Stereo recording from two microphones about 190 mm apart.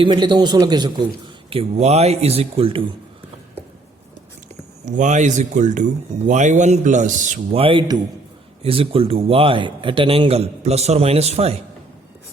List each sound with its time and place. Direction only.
0.0 s a man's voice: 25° right (ahead or behind)
4.9 s a man's voice: 40° right (ahead or behind)
7.6 s a man's voice: 25° right (ahead or behind)